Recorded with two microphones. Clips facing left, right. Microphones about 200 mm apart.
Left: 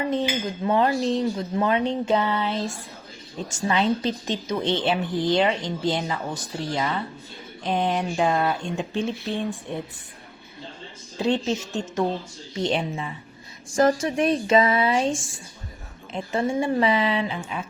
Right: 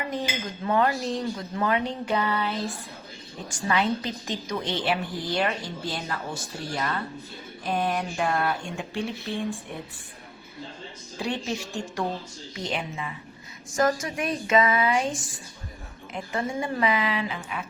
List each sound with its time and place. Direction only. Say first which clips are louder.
0.6 s a woman's voice: left 3 dB; 25° left (ahead or behind)
11.2 s a woman's voice: left 6 dB; 20° left (ahead or behind)